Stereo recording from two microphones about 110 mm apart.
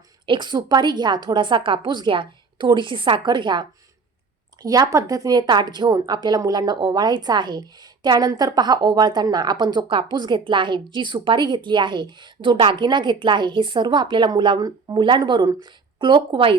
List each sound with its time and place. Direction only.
0.3 s a woman's voice: 45° right (ahead or behind)
4.6 s a woman's voice: 35° right (ahead or behind); by 16.6 s 50° right (ahead or behind)